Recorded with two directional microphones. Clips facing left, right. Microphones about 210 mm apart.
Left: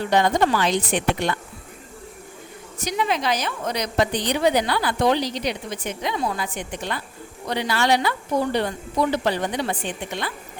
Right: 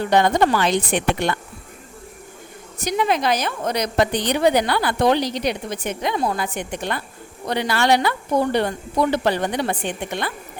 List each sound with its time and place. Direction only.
0.0 s a woman's voice: 60° right (ahead or behind)
2.8 s a woman's voice: 50° right (ahead or behind)